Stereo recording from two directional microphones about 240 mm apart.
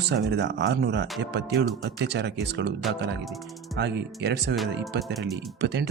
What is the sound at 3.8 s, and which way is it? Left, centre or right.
Speech, right.